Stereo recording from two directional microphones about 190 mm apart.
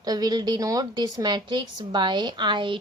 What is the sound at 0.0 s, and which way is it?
A woman's voice, 20° right (ahead or behind).